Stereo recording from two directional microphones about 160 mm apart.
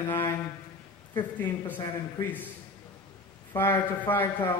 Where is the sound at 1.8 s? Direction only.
15° left (ahead or behind).